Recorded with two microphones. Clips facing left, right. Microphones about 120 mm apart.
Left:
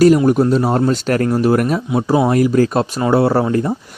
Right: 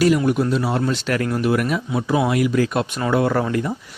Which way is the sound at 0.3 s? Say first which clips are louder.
Left 6 dB; 40° left (ahead or behind).